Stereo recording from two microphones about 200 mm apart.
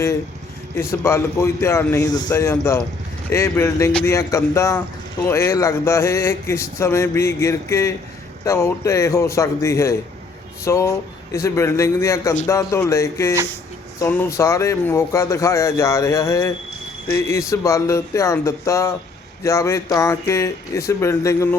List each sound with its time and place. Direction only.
0.8 s speech: 15° left (ahead or behind)